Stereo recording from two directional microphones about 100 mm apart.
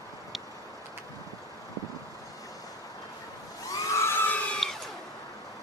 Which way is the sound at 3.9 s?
20° left (ahead or behind).